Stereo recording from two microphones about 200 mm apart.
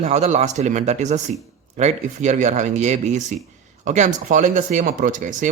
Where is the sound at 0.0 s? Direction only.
35° right (ahead or behind).